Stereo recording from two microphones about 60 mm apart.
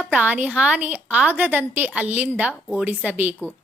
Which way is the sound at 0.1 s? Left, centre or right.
Right.